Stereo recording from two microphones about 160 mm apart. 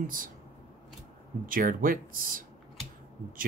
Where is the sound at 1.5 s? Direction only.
60° right (ahead or behind).